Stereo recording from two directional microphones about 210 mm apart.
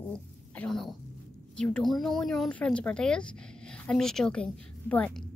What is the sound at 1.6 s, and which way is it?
Speech, 5° left (ahead or behind).